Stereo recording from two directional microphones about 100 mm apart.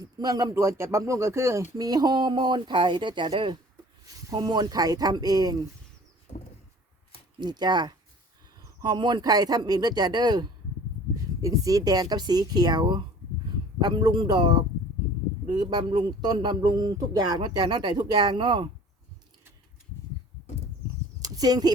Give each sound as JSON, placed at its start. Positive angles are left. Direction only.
{"t": 0.0, "sound": "speech", "side_deg": -40}
{"t": 0.5, "sound": "speech", "side_deg": -30}
{"t": 1.7, "sound": "a man's voice", "side_deg": -40}
{"t": 4.0, "sound": "speech", "side_deg": -40}
{"t": 6.3, "sound": "a sound", "side_deg": 90}
{"t": 7.3, "sound": "a man's voice", "side_deg": -45}
{"t": 21.2, "sound": "a sound", "side_deg": -40}